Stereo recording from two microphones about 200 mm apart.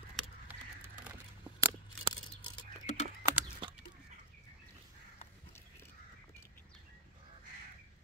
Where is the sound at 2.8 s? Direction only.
35° left (ahead or behind).